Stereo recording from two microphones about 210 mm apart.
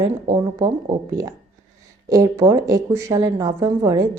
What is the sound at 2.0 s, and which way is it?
Speech, 15° right (ahead or behind).